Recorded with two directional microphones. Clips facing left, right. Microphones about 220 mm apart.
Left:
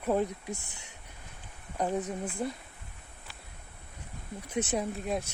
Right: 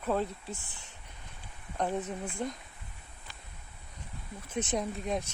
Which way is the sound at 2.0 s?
5° left (ahead or behind).